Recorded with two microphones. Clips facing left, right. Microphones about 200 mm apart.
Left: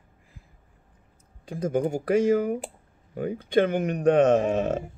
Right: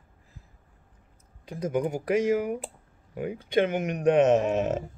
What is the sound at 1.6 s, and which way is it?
Speech, 30° left (ahead or behind).